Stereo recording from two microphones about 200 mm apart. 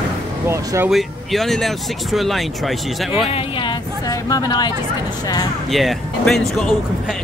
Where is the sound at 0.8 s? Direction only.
Centre (ahead or behind).